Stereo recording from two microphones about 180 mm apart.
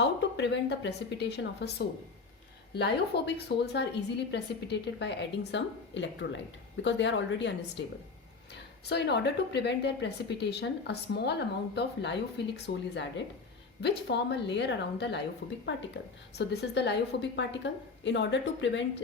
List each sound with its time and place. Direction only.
0.0 s a woman's voice: 75° left (ahead or behind)
2.7 s a woman's voice: 65° left (ahead or behind)
8.9 s a woman's voice: 70° left (ahead or behind)
16.4 s a woman's voice: 70° left (ahead or behind); by 18.9 s 90° left